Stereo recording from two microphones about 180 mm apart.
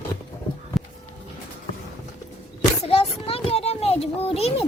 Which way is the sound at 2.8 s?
35° left (ahead or behind).